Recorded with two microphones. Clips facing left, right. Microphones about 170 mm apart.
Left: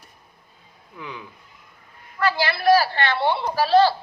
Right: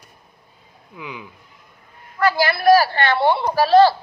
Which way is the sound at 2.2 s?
45° right (ahead or behind).